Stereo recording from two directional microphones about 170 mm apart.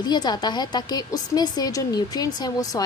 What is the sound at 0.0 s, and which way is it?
A woman's voice, 25° left (ahead or behind).